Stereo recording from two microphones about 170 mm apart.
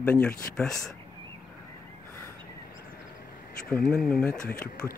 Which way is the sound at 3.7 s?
5° left (ahead or behind).